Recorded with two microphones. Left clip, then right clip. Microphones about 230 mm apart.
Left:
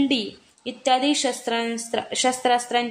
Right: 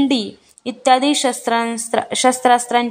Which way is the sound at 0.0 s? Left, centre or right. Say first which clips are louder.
Right 5 dB; right.